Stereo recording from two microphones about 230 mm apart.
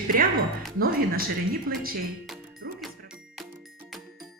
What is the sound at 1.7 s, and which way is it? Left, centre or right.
Speech, right.